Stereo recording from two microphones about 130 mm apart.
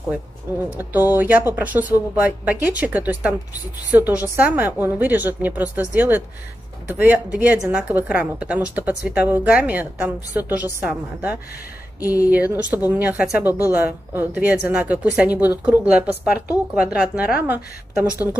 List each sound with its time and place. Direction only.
0.6 s speech: 15° right (ahead or behind)
12.0 s speech: 25° left (ahead or behind)
12.3 s speech: 10° right (ahead or behind)